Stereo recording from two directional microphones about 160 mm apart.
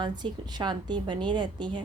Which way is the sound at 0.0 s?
25° right (ahead or behind).